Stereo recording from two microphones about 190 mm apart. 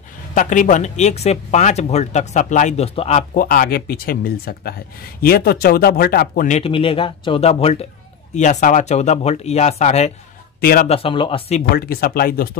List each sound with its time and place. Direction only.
0.3 s speech: 40° left (ahead or behind)
10.6 s speech: 50° left (ahead or behind)
10.9 s speech: 30° left (ahead or behind)
11.7 s speech: 55° left (ahead or behind)